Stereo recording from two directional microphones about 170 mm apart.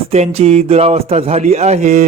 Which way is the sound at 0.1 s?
40° right (ahead or behind).